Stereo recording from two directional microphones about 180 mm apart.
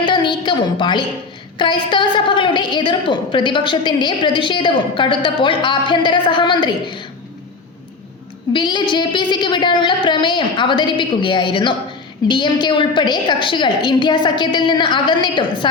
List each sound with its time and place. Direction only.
0.0 s a sound: 25° left (ahead or behind)
1.5 s a woman's voice: 25° left (ahead or behind)
8.5 s a woman's voice: 25° left (ahead or behind)